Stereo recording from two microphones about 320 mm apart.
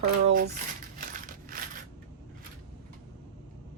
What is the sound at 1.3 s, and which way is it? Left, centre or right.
Crushing, right.